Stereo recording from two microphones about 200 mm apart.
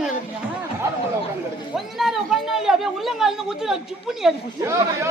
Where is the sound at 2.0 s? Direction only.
Centre (ahead or behind).